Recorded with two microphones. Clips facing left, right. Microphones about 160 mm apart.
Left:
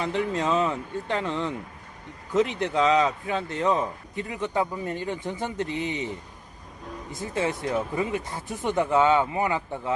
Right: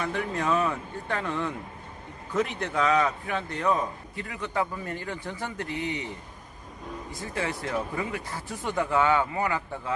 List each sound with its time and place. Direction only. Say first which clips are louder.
0.0 s a man's voice: left 3 dB; 20° left (ahead or behind)
7.1 s a man's voice: left 5 dB; 20° left (ahead or behind)